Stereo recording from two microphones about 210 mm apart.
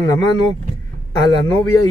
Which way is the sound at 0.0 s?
15° left (ahead or behind).